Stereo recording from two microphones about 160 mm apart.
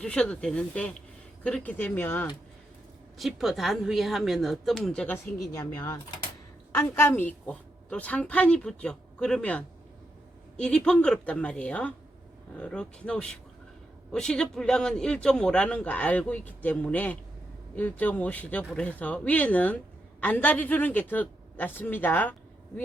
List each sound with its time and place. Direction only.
0.0 s a man's voice: 5° left (ahead or behind)
3.2 s a woman's voice: centre (ahead or behind)
5.1 s a man's voice: 20° left (ahead or behind)